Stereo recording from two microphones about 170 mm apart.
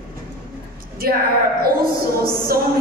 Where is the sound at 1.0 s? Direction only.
60° right (ahead or behind).